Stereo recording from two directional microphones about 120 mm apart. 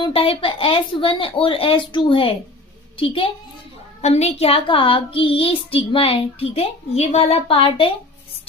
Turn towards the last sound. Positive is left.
turn(degrees=50)  # may be behind; listen again after turning